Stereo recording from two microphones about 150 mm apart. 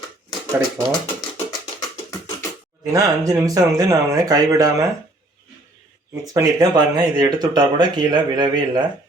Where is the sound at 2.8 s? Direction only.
20° right (ahead or behind).